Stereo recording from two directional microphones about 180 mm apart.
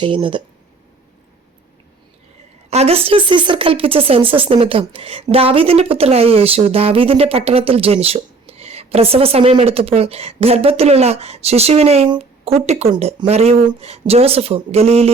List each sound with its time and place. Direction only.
0.0 s speech: 30° right (ahead or behind)
2.6 s speech: 35° right (ahead or behind)